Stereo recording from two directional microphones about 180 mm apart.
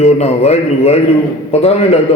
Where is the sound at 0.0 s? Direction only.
35° left (ahead or behind).